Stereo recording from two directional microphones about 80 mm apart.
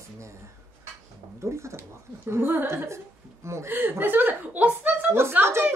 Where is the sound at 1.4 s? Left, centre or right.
Right.